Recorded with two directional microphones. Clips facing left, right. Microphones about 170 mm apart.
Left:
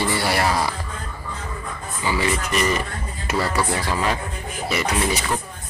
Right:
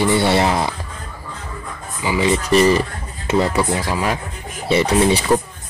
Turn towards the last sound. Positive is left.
turn(degrees=-30)  # may be behind; listen again after turning